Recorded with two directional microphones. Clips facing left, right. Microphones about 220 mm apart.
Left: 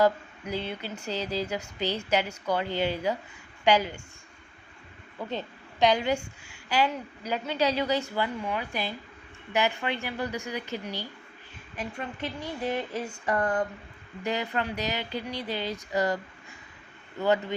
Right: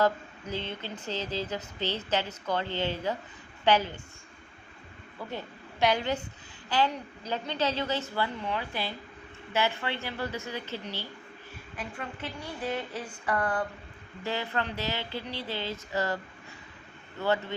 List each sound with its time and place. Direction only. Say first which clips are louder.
0.0 s speech: left 3 dB; 10° left (ahead or behind)
5.8 s speech: left 3 dB; 15° left (ahead or behind)
12.2 s speech: left 4 dB; 10° left (ahead or behind)
13.2 s a sound: left 2 dB; 25° left (ahead or behind)
14.3 s speech: left 2 dB; 15° left (ahead or behind)